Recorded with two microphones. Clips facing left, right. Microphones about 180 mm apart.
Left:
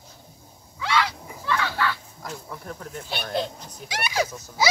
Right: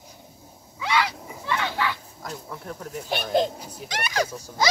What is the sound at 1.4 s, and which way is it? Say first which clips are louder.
Children playing: left 1 dB; 20° right (ahead or behind).